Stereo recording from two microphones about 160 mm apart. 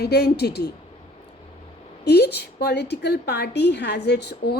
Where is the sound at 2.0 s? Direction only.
90° left.